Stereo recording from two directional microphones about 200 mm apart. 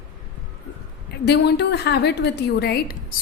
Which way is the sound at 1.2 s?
55° left (ahead or behind).